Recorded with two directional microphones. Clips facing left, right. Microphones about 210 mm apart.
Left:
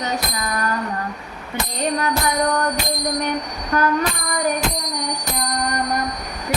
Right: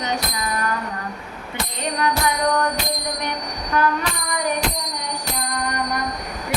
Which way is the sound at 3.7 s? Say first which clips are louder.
Left 2 dB; 45° left (ahead or behind).